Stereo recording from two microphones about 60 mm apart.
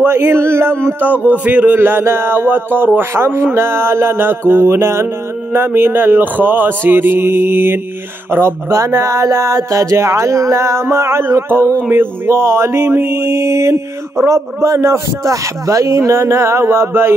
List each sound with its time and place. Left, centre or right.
0.0 s speech: right
1.0 s speech: right
1.8 s speech: right